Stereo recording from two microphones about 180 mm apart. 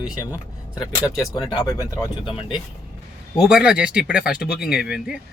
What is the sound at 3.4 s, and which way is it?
Speech, 5° right (ahead or behind).